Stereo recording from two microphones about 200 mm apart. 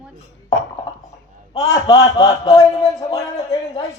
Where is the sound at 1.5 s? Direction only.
15° left (ahead or behind).